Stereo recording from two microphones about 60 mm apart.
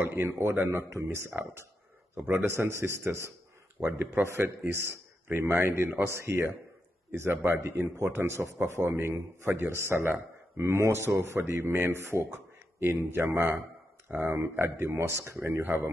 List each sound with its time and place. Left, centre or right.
0.0 s a man's voice: right
3.8 s a man's voice: right